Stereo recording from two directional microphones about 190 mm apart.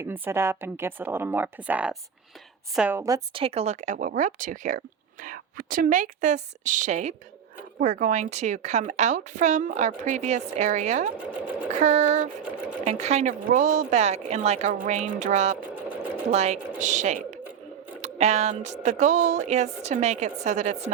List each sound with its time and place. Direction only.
0.0 s speech: 15° right (ahead or behind)
3.3 s a woman's voice: 30° right (ahead or behind)